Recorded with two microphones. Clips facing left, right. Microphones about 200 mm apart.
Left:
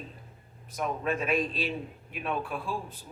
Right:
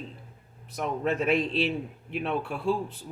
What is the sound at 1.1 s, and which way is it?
Speech, 70° right (ahead or behind).